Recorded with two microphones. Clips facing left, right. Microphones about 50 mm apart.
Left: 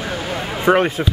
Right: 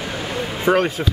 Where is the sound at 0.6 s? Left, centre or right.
Centre.